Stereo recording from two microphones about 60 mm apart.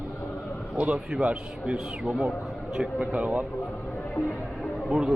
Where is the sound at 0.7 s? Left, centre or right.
Centre.